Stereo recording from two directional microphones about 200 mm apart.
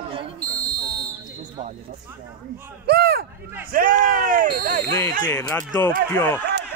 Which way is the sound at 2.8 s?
50° right (ahead or behind).